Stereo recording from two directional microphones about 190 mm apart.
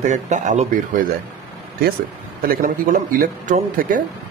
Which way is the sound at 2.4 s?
45° right (ahead or behind).